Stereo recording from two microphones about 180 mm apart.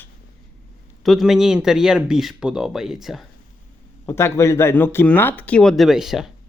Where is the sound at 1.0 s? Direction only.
Centre (ahead or behind).